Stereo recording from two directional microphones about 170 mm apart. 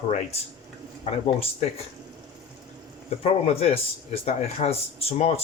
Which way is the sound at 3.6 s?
35° left (ahead or behind).